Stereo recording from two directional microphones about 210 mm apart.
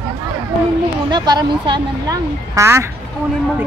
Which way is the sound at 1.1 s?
20° right (ahead or behind).